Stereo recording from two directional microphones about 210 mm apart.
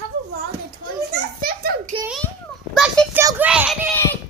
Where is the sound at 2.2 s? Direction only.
Centre (ahead or behind).